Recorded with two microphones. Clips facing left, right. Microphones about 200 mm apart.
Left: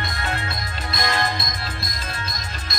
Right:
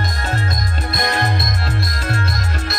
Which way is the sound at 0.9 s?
55° right (ahead or behind).